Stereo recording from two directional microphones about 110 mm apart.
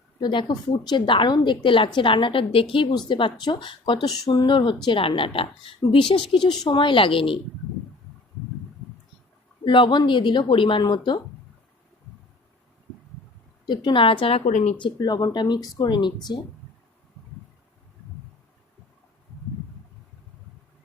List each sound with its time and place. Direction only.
0.2 s a woman's voice: 45° left (ahead or behind)
9.6 s a woman's voice: 50° left (ahead or behind)
13.7 s a woman's voice: 45° left (ahead or behind); by 14.8 s 85° left
14.8 s speech: 45° left (ahead or behind)